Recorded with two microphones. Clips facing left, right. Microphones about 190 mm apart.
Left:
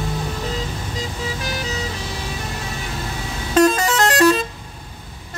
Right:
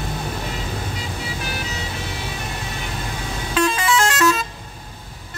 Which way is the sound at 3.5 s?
40° left (ahead or behind).